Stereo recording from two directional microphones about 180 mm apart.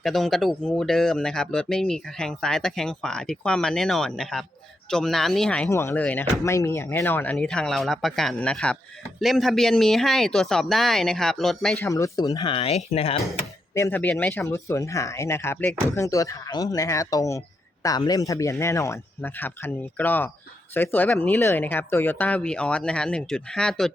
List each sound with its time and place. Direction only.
0.0 s speech: centre (ahead or behind)
11.8 s speech: 15° left (ahead or behind); by 13.1 s 35° left (ahead or behind)
13.4 s speech: 15° left (ahead or behind)